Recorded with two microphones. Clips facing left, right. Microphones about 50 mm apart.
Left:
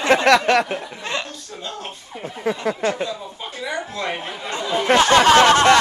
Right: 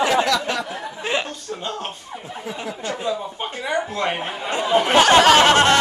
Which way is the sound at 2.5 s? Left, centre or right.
Left.